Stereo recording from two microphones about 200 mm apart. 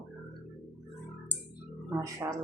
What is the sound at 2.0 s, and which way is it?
Speech, 15° right (ahead or behind).